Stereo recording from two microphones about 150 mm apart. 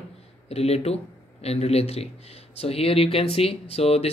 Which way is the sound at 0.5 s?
45° left (ahead or behind).